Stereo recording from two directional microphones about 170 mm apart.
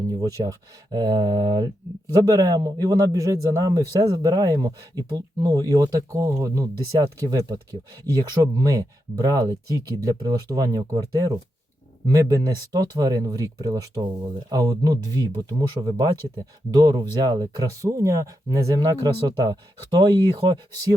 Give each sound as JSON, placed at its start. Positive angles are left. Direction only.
{"t": 0.1, "sound": "speech", "side_deg": -20}